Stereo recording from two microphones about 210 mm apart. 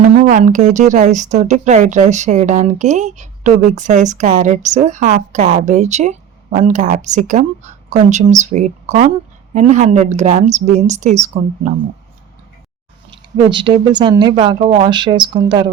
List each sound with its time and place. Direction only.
0.0 s speech: 35° right (ahead or behind)
13.5 s speech: 20° right (ahead or behind)